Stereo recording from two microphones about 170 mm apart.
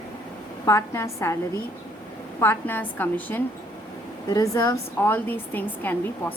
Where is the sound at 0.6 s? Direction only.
15° left (ahead or behind).